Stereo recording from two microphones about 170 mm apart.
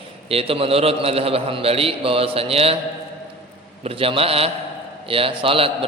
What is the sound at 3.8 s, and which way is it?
A man's voice, 35° right (ahead or behind).